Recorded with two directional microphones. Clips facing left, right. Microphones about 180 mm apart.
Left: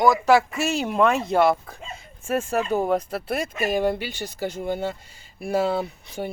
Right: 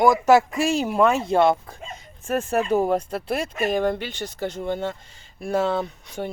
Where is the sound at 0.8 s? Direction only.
5° right (ahead or behind).